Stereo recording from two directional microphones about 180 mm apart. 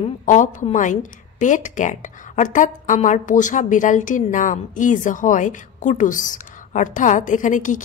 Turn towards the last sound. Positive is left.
turn(degrees=45)  # may be behind; listen again after turning